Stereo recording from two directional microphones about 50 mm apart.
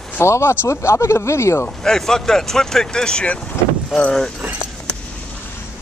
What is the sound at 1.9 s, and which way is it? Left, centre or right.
Speech, centre.